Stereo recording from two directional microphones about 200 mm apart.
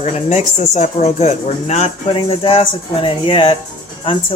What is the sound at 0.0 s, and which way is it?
Speech, 35° left (ahead or behind).